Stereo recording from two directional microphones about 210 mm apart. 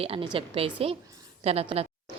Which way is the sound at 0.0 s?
25° right (ahead or behind).